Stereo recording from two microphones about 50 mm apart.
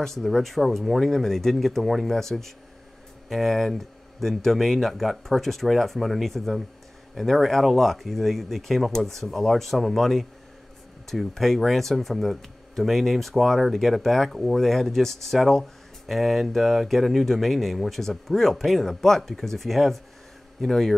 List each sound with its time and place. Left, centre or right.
0.0 s speech: centre